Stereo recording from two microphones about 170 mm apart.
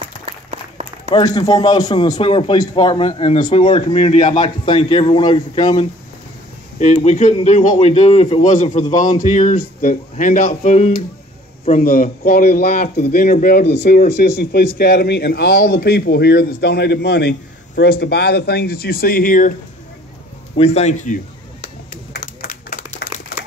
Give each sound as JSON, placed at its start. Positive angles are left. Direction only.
{"t": 0.0, "sound": "applause", "side_deg": -40}
{"t": 1.1, "sound": "a man's voice", "side_deg": 20}
{"t": 6.8, "sound": "a man's voice", "side_deg": 40}
{"t": 11.8, "sound": "a man's voice", "side_deg": 60}
{"t": 20.5, "sound": "a man's voice", "side_deg": 40}
{"t": 22.4, "sound": "clapping", "side_deg": 50}